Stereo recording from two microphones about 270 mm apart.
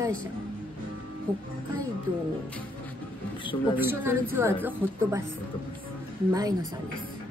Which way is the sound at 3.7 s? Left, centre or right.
Centre.